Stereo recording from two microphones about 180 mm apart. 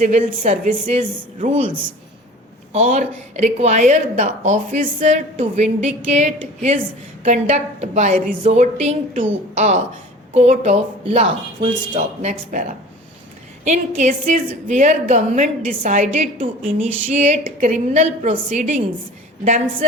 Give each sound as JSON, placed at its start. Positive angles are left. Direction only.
{"t": 0.0, "sound": "speech", "side_deg": -40}
{"t": 2.7, "sound": "speech", "side_deg": -45}